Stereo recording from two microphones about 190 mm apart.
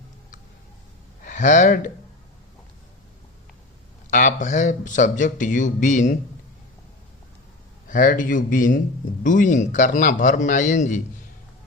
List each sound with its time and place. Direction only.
1.2 s speech: 40° left (ahead or behind)
4.1 s speech: 40° left (ahead or behind)
7.9 s a man's voice: 45° left (ahead or behind)